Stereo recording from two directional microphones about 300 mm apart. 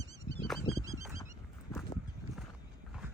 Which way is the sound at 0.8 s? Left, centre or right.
Centre.